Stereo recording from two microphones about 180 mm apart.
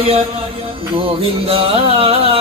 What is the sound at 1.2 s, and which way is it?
Music, 30° right (ahead or behind).